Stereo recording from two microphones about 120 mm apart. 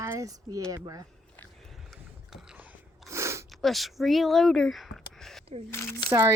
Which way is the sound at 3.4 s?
Centre (ahead or behind).